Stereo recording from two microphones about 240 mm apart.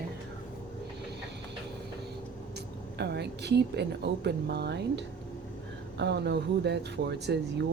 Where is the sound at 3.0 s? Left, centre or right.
Right.